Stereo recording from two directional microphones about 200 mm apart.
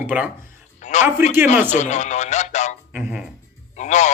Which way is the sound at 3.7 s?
35° left (ahead or behind).